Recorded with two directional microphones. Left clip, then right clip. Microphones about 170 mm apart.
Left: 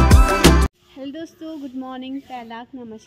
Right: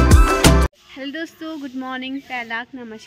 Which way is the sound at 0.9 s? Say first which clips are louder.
Right 4 dB; centre (ahead or behind).